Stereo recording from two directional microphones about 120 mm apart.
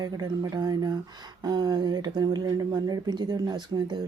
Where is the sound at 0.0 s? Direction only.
35° right (ahead or behind).